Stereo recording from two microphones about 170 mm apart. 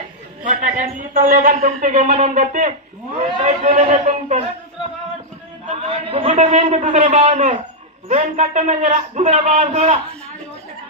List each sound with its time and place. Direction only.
0.4 s speech: 45° right (ahead or behind)
5.6 s a man's voice: 35° right (ahead or behind)